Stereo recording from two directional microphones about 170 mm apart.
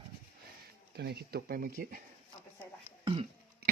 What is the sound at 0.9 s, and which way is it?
Speech, 70° right (ahead or behind).